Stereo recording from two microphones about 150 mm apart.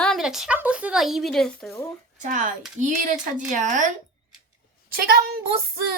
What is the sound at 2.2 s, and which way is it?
Speech, 55° right (ahead or behind).